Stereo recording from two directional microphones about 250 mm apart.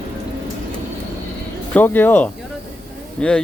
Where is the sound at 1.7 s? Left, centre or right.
Centre.